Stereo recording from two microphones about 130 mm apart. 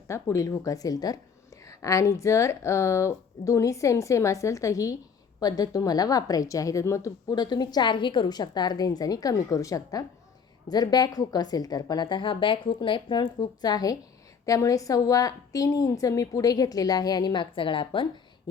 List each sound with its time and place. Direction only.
0.1 s a woman's voice: 25° left (ahead or behind); by 18.1 s 40° left (ahead or behind)